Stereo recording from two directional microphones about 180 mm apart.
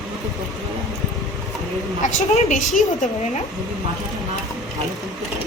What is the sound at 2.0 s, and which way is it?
Speech, 45° left (ahead or behind).